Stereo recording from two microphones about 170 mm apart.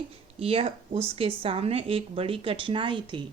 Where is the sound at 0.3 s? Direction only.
35° right (ahead or behind).